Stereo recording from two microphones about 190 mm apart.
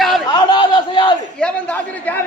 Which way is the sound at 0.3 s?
25° left (ahead or behind).